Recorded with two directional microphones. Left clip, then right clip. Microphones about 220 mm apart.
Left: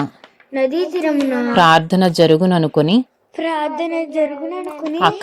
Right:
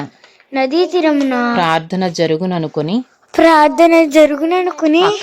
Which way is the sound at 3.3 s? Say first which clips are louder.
Right 11 dB; 50° right (ahead or behind).